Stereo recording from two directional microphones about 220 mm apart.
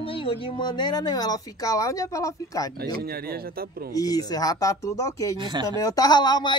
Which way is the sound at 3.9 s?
15° left (ahead or behind).